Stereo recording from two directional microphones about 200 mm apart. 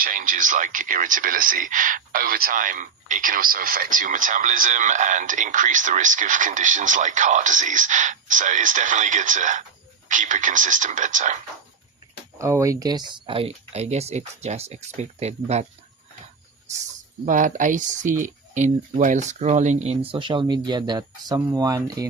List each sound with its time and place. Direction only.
0.0 s speech: 40° right (ahead or behind)
12.4 s speech: 15° right (ahead or behind); by 15.6 s 35° right (ahead or behind)
17.2 s speech: 40° right (ahead or behind); by 22.1 s 20° right (ahead or behind)